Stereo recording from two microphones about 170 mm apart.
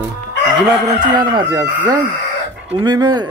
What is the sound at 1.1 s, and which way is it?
Speech, 25° right (ahead or behind).